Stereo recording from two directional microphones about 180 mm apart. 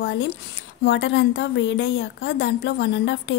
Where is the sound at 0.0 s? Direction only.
85° left.